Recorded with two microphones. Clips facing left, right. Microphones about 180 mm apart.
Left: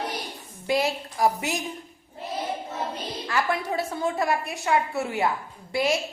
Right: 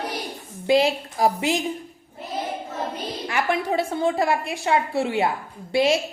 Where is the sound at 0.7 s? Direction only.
25° right (ahead or behind).